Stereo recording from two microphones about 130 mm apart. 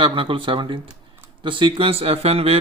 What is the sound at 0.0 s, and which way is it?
Speech, 40° right (ahead or behind).